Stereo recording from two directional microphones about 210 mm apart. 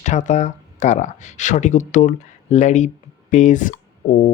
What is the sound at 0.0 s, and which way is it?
Speech, 35° left (ahead or behind).